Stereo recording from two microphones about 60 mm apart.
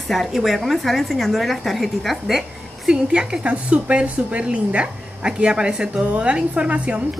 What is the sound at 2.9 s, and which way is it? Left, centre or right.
A woman's voice, centre.